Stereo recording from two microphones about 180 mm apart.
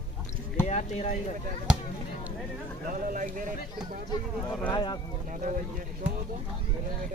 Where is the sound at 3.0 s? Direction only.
50° right (ahead or behind).